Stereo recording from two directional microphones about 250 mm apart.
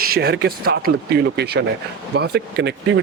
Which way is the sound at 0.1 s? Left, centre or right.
Right.